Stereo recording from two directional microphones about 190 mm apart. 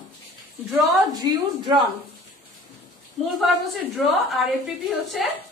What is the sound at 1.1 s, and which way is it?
Speech, 20° right (ahead or behind).